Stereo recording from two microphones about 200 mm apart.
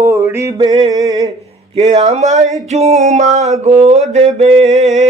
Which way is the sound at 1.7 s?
30° right (ahead or behind).